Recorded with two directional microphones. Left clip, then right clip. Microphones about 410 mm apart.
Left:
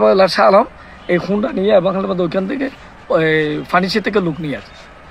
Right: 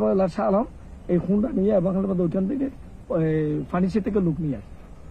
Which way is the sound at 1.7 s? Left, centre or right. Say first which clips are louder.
Left 11 dB; centre.